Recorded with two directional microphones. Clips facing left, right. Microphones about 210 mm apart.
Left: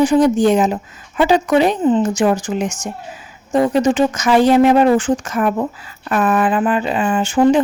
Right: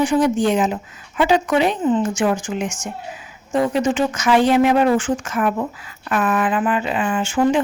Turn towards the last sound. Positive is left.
turn(degrees=35)  # may be behind; listen again after turning